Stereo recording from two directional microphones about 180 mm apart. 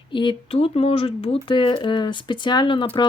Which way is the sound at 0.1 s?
25° left (ahead or behind).